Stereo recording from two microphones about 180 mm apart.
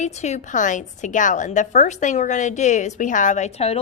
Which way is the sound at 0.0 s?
40° left (ahead or behind).